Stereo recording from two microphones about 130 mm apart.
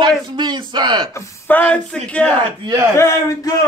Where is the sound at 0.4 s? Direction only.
35° right (ahead or behind).